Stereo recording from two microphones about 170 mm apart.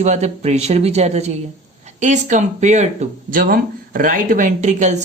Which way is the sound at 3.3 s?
55° right (ahead or behind).